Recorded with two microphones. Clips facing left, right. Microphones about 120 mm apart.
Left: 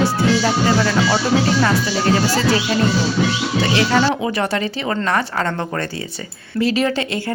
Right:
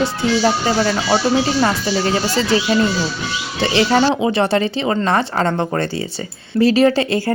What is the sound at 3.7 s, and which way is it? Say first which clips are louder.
Speech: right 3 dB; 35° right (ahead or behind).